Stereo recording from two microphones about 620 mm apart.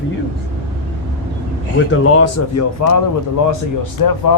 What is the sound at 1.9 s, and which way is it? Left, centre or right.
Speech, left.